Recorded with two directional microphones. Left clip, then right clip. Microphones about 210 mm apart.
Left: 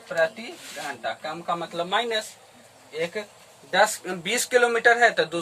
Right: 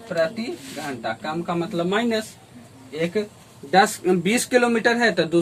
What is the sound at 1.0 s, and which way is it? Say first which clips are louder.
Speech: right 3 dB; 10° left (ahead or behind).